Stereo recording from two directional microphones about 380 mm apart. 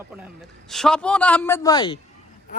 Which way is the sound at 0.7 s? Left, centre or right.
Centre.